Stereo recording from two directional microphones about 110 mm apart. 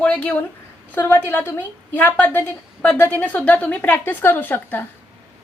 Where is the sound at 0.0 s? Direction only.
10° left (ahead or behind).